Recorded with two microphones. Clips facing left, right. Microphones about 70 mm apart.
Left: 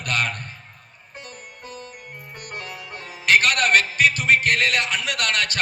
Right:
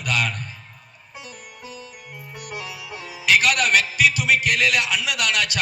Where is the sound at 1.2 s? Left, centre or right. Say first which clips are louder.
Even; left.